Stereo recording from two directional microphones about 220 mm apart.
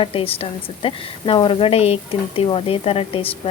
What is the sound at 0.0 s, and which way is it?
Speech, 25° left (ahead or behind).